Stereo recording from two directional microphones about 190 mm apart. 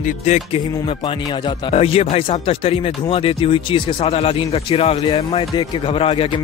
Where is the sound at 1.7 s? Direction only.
30° left (ahead or behind).